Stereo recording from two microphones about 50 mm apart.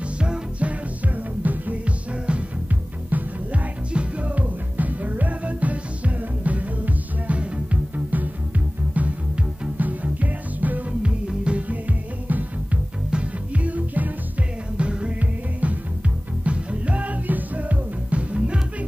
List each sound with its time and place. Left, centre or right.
0.2 s music: right
3.1 s music: right
11.0 s music: right
14.8 s music: right